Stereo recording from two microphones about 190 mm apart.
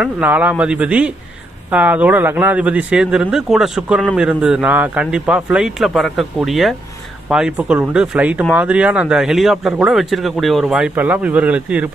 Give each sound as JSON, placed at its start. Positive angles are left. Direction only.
{"t": 0.0, "sound": "speech", "side_deg": -10}